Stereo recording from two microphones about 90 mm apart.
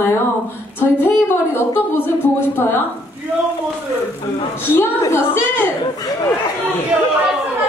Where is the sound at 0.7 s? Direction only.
25° left (ahead or behind).